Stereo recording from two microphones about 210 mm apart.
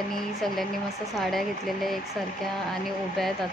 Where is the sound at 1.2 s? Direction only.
Centre (ahead or behind).